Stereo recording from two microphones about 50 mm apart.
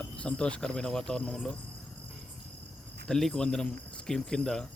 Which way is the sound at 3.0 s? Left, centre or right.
Centre.